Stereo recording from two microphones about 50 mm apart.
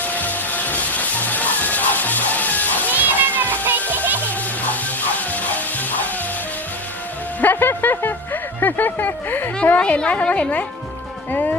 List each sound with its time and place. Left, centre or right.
0.0 s music: left
2.9 s water: right
3.8 s music: right
4.3 s music: left
7.4 s speech: left
9.7 s a woman's voice: left
11.3 s speech: left